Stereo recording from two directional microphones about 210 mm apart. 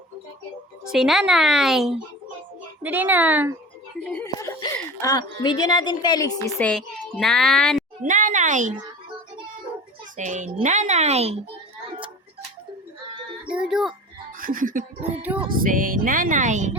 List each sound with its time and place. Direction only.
0.9 s a child's voice: centre (ahead or behind)
4.0 s a child's voice: 5° left (ahead or behind)
4.4 s speech: 15° left (ahead or behind)
6.6 s a child's voice: 5° left (ahead or behind)
8.0 s speech: 40° right (ahead or behind)
10.2 s speech: 35° right (ahead or behind)
13.5 s speech: 5° right (ahead or behind)
14.3 s speech: 40° right (ahead or behind)